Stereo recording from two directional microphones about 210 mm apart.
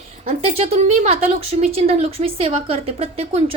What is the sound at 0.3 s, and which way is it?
A woman's voice, 30° right (ahead or behind).